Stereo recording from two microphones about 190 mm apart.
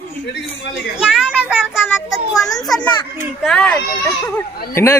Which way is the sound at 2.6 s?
5° left (ahead or behind).